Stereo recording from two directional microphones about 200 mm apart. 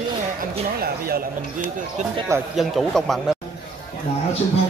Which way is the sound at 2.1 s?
15° right (ahead or behind).